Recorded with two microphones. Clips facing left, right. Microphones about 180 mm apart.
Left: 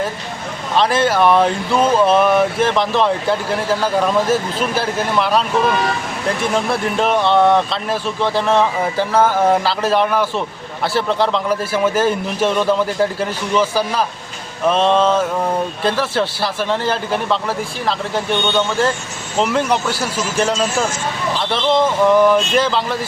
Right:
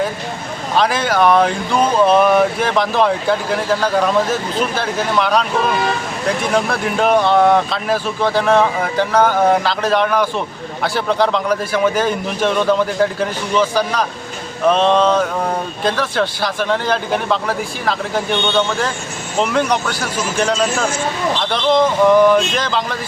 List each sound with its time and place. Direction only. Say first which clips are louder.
0.8 s speech: left 1 dB; centre (ahead or behind)
6.5 s speech: right 1 dB; centre (ahead or behind)